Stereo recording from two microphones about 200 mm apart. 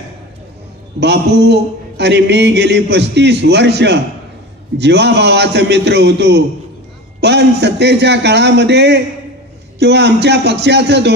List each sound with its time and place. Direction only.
0.9 s a man's voice: 55° right (ahead or behind)